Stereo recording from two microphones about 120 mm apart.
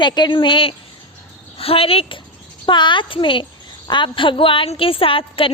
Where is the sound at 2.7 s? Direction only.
40° left (ahead or behind).